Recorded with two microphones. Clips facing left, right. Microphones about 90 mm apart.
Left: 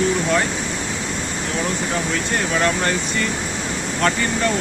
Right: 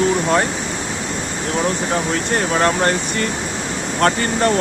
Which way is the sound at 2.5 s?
40° right (ahead or behind).